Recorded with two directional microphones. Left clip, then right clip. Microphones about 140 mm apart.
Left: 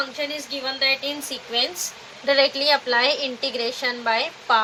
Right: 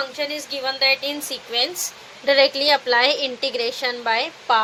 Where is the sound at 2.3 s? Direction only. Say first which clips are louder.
Right 2 dB; 60° right (ahead or behind).